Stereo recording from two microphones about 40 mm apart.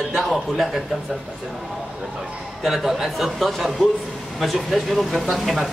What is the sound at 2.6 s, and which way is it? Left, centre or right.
A man's voice, centre.